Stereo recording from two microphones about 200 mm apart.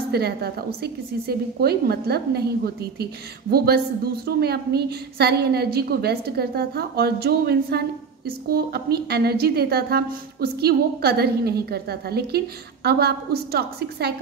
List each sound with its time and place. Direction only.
0.1 s a woman's voice: 55° right (ahead or behind)